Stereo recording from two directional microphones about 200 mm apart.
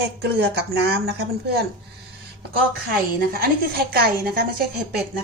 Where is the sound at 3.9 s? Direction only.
50° right (ahead or behind).